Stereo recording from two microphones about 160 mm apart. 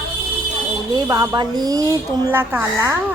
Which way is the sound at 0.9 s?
25° right (ahead or behind).